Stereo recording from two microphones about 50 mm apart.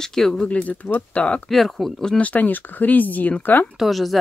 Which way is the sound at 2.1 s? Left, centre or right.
Left.